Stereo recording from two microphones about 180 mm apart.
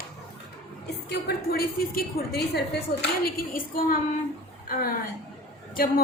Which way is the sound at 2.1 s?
65° left (ahead or behind).